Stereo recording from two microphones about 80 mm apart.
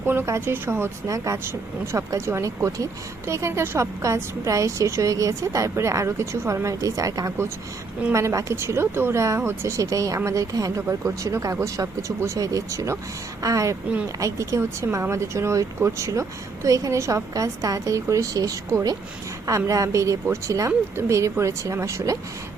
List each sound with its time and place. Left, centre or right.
0.0 s a woman's voice: right